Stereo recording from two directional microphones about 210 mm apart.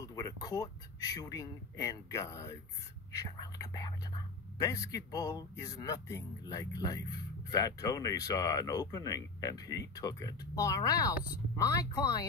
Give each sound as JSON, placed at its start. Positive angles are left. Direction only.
{"t": 0.0, "sound": "speech", "side_deg": 15}